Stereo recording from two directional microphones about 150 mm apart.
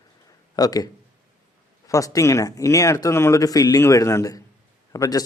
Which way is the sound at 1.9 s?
20° left (ahead or behind).